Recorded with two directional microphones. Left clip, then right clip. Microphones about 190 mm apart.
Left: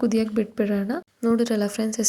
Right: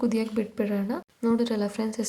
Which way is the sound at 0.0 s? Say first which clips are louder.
Left 4 dB; 20° left (ahead or behind).